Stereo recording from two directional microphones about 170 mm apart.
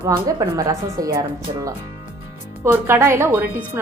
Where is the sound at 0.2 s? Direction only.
20° right (ahead or behind).